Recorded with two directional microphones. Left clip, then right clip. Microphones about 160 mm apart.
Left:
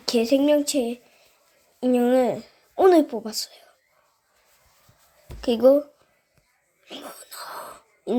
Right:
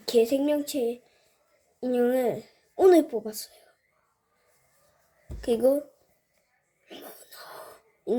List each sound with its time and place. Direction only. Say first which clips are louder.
0.0 s a woman's voice: left 2 dB; 15° left (ahead or behind)
5.4 s speech: left 6 dB; 10° left (ahead or behind)
6.8 s a sound: left 6 dB; 20° left (ahead or behind)